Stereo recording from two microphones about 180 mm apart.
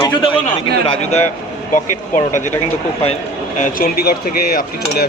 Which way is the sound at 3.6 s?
55° left (ahead or behind).